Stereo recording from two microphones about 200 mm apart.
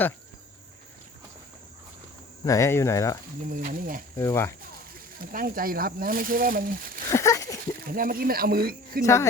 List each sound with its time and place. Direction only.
2.4 s speech: 15° left (ahead or behind)
3.5 s speech: 45° right (ahead or behind)
4.2 s speech: 15° left (ahead or behind)
5.2 s speech: 45° right (ahead or behind)
7.1 s a sound: 15° left (ahead or behind)
7.9 s speech: 45° right (ahead or behind)